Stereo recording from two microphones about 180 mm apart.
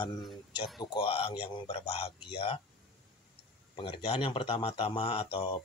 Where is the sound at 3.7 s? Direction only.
30° left (ahead or behind).